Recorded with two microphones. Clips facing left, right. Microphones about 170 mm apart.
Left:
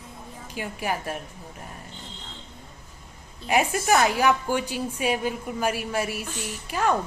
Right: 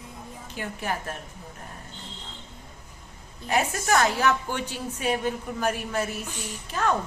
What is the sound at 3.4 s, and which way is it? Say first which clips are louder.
A woman's voice: left 3 dB; 10° left (ahead or behind).